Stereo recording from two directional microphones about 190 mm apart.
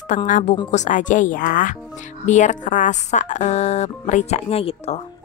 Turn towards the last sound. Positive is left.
turn(degrees=30)  # may be behind; listen again after turning